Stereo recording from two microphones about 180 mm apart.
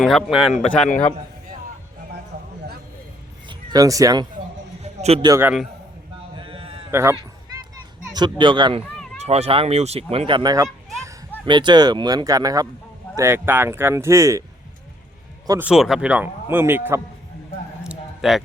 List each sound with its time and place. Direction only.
0.0 s speech: 5° left (ahead or behind)
3.7 s speech: 20° right (ahead or behind)
4.8 s a sound: 35° right (ahead or behind)
5.2 s a man's voice: 15° right (ahead or behind)
6.3 s sheep: 30° right (ahead or behind)
6.9 s a man's voice: 15° right (ahead or behind)
8.1 s a man's voice: 25° right (ahead or behind)
15.4 s a man's voice: 10° right (ahead or behind)
17.8 s a sound: centre (ahead or behind)